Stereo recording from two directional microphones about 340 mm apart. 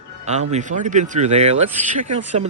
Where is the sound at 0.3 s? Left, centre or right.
Centre.